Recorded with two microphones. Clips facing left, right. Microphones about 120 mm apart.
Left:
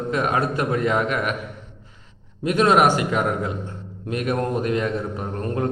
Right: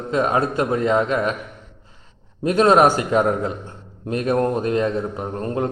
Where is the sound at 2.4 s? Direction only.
35° right (ahead or behind).